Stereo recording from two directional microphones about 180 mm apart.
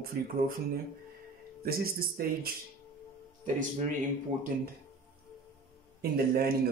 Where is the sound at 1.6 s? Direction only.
55° right (ahead or behind).